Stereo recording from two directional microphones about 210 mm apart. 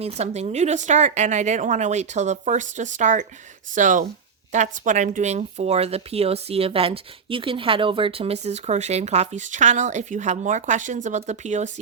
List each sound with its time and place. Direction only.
0.0 s speech: 30° right (ahead or behind)